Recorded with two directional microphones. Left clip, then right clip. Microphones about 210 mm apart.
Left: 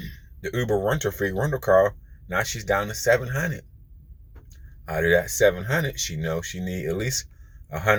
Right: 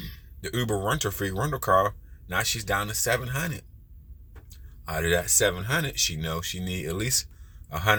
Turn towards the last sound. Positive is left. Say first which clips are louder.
# left 2 dB
turn(degrees=-20)  # may be behind; listen again after turning